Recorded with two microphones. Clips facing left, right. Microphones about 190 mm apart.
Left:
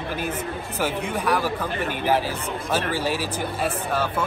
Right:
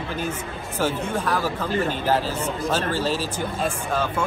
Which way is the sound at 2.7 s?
10° left (ahead or behind).